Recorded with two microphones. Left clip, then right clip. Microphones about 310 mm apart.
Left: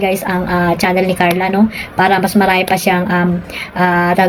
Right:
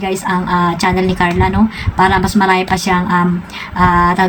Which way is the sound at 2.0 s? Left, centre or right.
Right.